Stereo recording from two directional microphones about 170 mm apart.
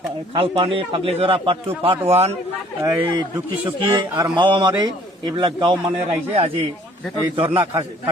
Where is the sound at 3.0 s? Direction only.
25° right (ahead or behind).